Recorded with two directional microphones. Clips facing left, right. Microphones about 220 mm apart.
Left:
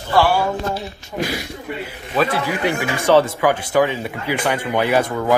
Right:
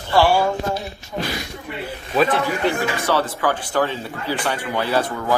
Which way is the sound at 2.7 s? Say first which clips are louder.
Left 7 dB; 15° left (ahead or behind).